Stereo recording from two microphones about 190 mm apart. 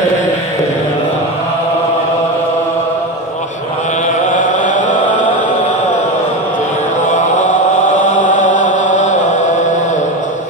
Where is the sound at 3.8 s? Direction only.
40° left (ahead or behind).